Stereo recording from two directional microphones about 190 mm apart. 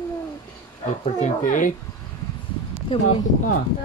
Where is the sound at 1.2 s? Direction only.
45° left (ahead or behind).